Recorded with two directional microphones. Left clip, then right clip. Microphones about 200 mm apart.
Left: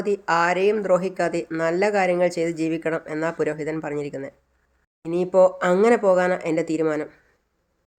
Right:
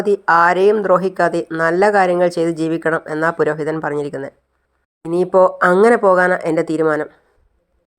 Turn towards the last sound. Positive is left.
turn(degrees=-15)  # may be behind; listen again after turning